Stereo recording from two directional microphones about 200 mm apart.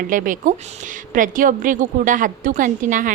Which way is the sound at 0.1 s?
40° right (ahead or behind).